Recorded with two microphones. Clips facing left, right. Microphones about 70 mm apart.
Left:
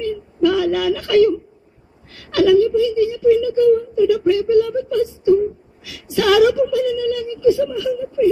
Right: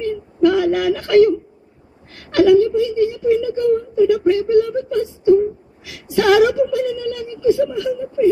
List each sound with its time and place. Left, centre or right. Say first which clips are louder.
0.0 s whimper: right 2 dB; right
2.1 s a woman's voice: right 1 dB; right